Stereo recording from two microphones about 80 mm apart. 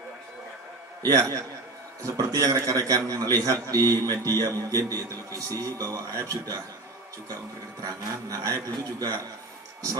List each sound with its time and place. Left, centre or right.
1.0 s a man's voice: right
7.9 s a man's voice: right